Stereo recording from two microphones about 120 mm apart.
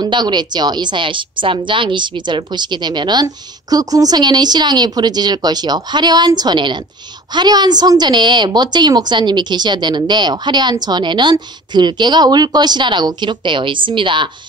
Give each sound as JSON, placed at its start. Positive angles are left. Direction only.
{"t": 0.0, "sound": "a woman's voice", "side_deg": -40}